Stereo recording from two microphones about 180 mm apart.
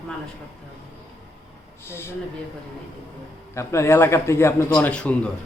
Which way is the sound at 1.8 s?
15° left (ahead or behind).